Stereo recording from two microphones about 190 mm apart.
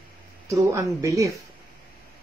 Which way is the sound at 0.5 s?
15° right (ahead or behind).